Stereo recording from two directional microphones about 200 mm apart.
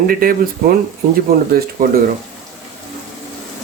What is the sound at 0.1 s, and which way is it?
Speech, 45° right (ahead or behind).